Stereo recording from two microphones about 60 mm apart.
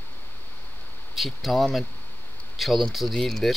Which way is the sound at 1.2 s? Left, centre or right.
Centre.